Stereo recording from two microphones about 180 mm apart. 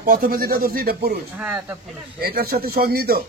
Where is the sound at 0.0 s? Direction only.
55° right (ahead or behind).